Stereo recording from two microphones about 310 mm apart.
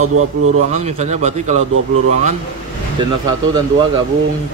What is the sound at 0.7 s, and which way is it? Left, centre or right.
Speech, right.